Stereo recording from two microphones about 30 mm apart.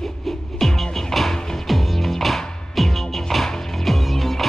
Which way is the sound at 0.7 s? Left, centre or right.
Centre.